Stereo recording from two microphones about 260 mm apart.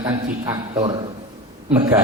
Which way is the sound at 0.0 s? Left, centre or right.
Centre.